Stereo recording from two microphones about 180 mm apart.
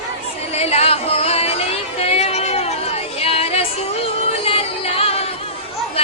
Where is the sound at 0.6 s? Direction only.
35° left (ahead or behind).